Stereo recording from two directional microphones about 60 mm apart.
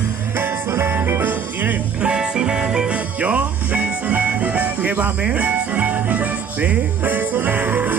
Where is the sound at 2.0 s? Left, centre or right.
Centre.